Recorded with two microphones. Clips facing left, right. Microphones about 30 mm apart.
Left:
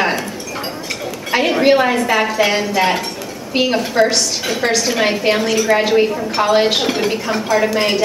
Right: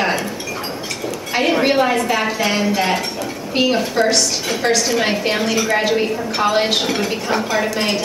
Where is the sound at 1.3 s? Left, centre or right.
Centre.